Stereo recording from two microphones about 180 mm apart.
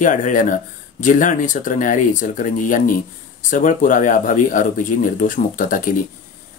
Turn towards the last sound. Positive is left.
turn(degrees=50)  # may be behind; listen again after turning